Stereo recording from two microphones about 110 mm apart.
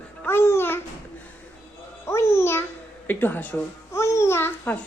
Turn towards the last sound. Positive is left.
turn(degrees=20)  # may be behind; listen again after turning